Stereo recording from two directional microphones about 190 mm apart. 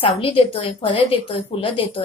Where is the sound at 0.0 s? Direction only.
30° left (ahead or behind).